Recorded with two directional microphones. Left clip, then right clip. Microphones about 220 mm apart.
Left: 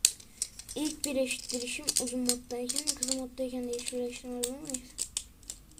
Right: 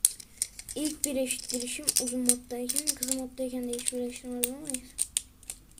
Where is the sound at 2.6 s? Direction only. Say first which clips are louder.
Right 1 dB; 20° right (ahead or behind).